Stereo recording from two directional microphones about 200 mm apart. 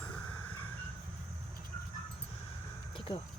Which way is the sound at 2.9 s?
25° left (ahead or behind).